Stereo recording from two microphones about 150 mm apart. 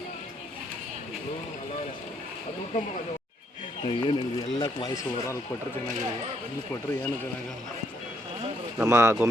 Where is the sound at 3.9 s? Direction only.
35° left (ahead or behind).